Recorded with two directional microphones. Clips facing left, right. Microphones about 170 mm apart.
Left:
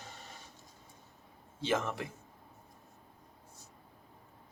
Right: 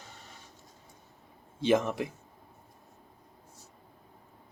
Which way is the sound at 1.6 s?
15° right (ahead or behind).